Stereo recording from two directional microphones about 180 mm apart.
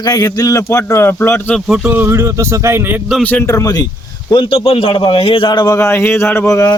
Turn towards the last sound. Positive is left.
turn(degrees=15)  # may be behind; listen again after turning